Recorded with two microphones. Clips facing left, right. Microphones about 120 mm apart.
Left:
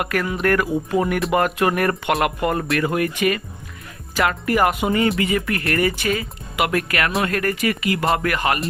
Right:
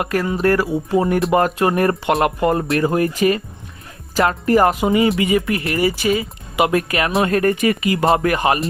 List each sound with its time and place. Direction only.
0.0 s speech: 25° right (ahead or behind)
5.2 s speech: 10° right (ahead or behind)
6.6 s speech: 25° right (ahead or behind)